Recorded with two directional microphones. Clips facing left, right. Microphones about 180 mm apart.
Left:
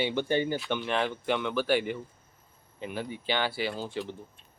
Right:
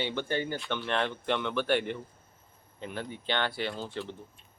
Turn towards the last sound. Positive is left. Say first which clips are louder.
# left 2 dB
turn(degrees=10)  # may be behind; listen again after turning